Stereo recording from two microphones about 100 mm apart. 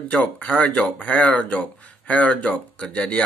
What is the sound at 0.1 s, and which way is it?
Mantra, 15° left (ahead or behind).